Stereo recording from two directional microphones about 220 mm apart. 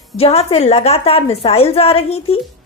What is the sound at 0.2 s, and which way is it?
A woman's voice, 25° left (ahead or behind).